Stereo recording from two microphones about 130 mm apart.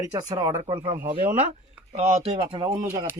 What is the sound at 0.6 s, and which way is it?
Speech, 40° right (ahead or behind).